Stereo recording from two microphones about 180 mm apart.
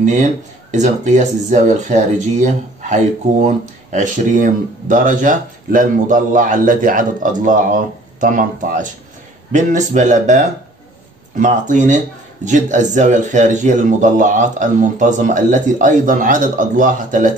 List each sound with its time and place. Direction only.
0.0 s speech: 40° right (ahead or behind)